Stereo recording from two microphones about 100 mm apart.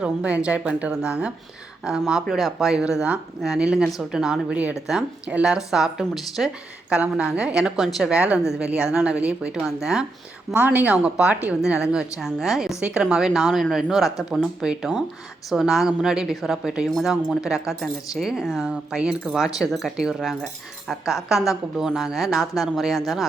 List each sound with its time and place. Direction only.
0.0 s a woman's voice: 15° right (ahead or behind)
10.5 s a woman's voice: 20° right (ahead or behind); by 23.2 s centre (ahead or behind)